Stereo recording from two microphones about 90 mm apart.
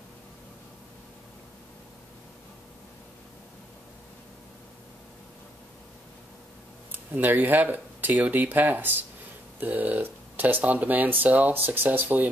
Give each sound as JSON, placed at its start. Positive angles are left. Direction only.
{"t": 6.9, "sound": "speech", "side_deg": -20}